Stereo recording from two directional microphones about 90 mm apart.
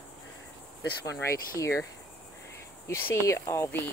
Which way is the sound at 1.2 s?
35° left (ahead or behind).